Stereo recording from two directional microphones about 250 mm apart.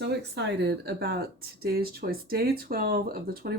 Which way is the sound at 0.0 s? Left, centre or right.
Right.